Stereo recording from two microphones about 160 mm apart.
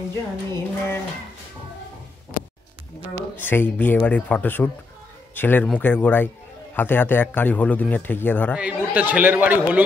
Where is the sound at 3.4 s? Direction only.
15° left (ahead or behind).